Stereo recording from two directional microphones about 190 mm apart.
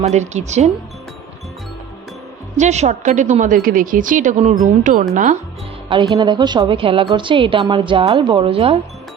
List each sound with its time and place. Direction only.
0.0 s a woman's voice: 35° right (ahead or behind)
2.6 s a woman's voice: 35° right (ahead or behind)
5.9 s a woman's voice: 20° right (ahead or behind)